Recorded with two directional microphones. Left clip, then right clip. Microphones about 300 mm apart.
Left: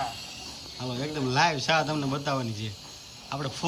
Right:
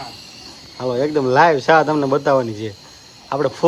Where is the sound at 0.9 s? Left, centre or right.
Centre.